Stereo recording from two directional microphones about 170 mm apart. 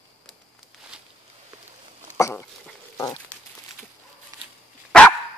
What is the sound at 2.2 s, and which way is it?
Dog, 15° left (ahead or behind).